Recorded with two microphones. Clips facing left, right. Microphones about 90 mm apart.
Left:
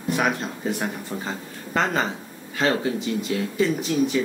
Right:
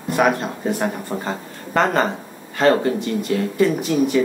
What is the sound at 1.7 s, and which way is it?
Speech, centre (ahead or behind).